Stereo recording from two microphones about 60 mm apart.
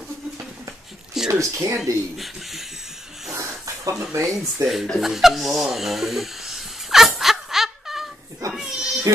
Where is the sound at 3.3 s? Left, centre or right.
Right.